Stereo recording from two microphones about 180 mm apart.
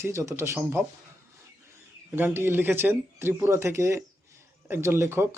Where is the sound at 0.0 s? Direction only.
15° right (ahead or behind).